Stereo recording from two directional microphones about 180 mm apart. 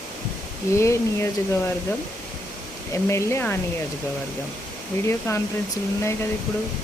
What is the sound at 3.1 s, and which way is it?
Speech, 15° left (ahead or behind).